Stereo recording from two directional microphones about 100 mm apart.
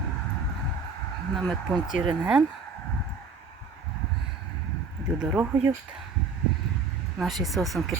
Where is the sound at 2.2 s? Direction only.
10° right (ahead or behind).